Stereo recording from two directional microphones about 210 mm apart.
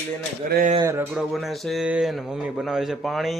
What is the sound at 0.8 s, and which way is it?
Speech, 15° right (ahead or behind).